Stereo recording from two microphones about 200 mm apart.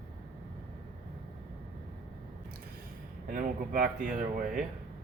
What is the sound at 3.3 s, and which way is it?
Speech, 45° right (ahead or behind).